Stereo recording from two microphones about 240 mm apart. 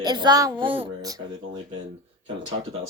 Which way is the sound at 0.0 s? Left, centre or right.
Centre.